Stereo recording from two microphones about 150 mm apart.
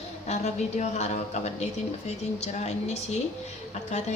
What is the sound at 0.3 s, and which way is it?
A woman's voice, 50° left (ahead or behind).